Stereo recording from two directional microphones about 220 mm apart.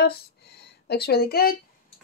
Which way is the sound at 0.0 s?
45° left (ahead or behind).